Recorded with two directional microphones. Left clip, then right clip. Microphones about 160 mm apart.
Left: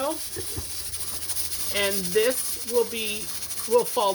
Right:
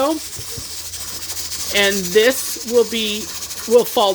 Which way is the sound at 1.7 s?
45° right (ahead or behind).